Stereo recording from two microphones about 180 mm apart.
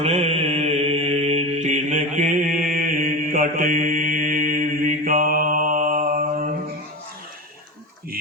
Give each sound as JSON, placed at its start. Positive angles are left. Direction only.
{"t": 0.0, "sound": "mantra", "side_deg": -35}